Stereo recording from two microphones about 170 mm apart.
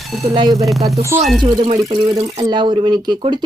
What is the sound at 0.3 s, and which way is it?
Speech, 25° right (ahead or behind).